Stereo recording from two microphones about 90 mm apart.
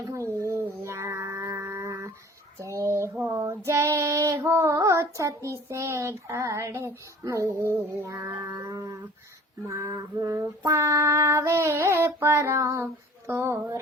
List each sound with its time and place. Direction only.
0.0 s a sound: 30° right (ahead or behind)
3.2 s child singing: 35° right (ahead or behind)
9.6 s female singing: 35° right (ahead or behind)